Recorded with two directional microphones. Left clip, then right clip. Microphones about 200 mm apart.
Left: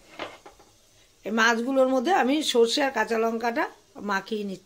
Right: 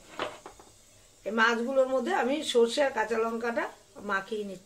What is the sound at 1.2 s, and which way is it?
A woman's voice, 50° left (ahead or behind).